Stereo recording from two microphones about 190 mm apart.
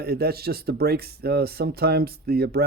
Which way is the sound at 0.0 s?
55° right (ahead or behind).